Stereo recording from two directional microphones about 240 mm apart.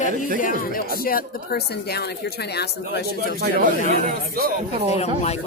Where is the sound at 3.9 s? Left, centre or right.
Right.